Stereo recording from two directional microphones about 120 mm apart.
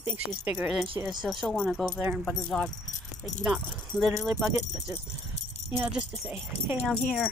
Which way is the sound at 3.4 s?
10° right (ahead or behind).